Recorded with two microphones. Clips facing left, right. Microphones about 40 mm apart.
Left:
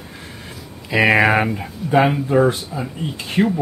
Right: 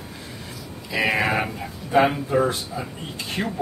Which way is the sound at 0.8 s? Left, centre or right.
Left.